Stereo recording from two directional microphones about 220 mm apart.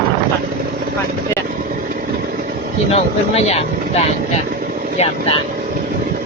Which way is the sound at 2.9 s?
30° left (ahead or behind).